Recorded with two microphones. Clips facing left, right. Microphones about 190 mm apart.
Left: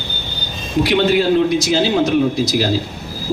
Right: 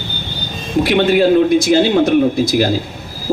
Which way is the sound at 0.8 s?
50° right (ahead or behind).